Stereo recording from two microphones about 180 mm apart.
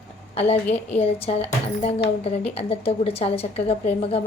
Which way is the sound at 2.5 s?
35° left (ahead or behind).